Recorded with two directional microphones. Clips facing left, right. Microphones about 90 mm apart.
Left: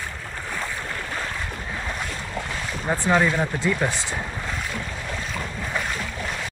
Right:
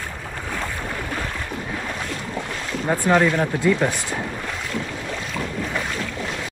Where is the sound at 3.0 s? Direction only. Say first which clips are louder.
Right 2 dB; 10° left (ahead or behind).